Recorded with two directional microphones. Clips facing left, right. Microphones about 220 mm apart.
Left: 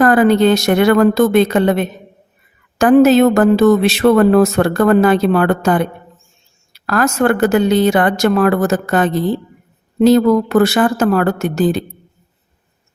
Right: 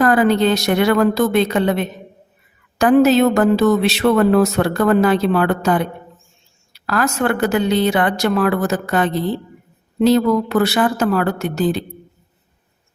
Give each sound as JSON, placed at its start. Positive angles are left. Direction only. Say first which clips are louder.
{"t": 0.0, "sound": "speech", "louder": "left 4 dB", "side_deg": 50}